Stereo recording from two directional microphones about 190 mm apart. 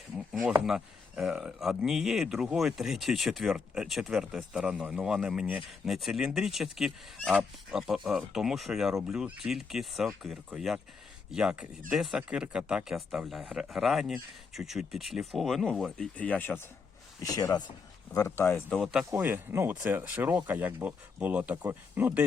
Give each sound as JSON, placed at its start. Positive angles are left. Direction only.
{"t": 0.4, "sound": "speech", "side_deg": -5}
{"t": 17.3, "sound": "speech", "side_deg": 20}